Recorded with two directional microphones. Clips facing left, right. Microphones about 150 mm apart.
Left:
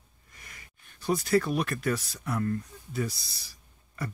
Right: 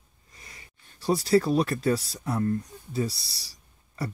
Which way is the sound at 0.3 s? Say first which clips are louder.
Right 1 dB; 30° right (ahead or behind).